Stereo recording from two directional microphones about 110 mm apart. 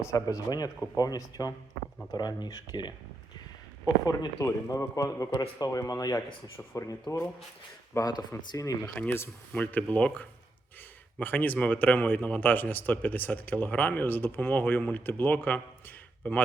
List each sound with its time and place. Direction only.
0.0 s speech: 30° left (ahead or behind)
4.0 s speech: 35° left (ahead or behind)
7.9 s speech: 35° left (ahead or behind)
9.0 s speech: 20° left (ahead or behind)